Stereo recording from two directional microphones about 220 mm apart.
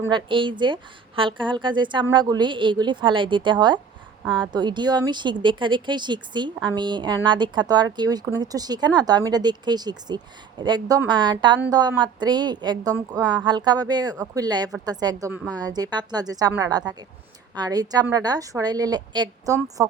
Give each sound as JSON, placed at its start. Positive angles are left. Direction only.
{"t": 0.1, "sound": "a woman's voice", "side_deg": -20}